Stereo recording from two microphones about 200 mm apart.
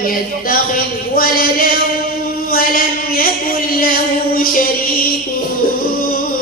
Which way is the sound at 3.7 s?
45° left (ahead or behind).